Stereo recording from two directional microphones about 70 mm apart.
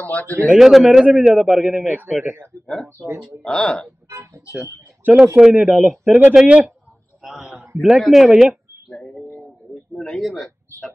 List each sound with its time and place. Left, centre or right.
0.0 s speech: left
0.6 s a man's voice: centre
1.9 s speech: right
2.6 s a man's voice: centre
4.1 s speech: right
5.1 s speech: centre
7.2 s a man's voice: centre
8.9 s bird: centre
9.9 s a man's voice: centre